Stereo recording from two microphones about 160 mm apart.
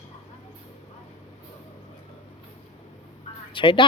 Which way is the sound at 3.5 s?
30° left (ahead or behind).